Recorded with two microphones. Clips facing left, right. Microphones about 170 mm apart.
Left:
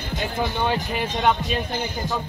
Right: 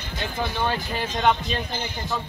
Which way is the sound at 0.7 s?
10° left (ahead or behind).